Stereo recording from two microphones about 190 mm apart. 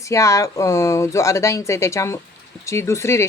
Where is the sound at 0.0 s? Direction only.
15° left (ahead or behind).